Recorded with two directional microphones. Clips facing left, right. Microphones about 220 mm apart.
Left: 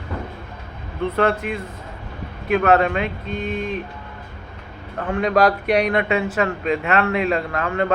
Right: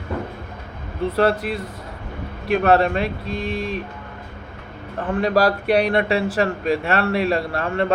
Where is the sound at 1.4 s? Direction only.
35° right (ahead or behind).